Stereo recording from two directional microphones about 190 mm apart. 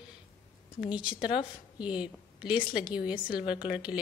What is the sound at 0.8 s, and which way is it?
Speech, 5° right (ahead or behind).